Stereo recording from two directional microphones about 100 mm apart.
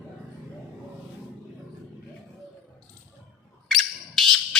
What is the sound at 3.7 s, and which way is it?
Bird, centre (ahead or behind).